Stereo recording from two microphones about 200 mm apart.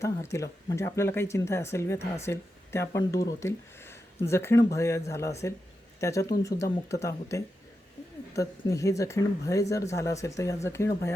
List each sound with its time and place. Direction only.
0.0 s speech: 15° left (ahead or behind)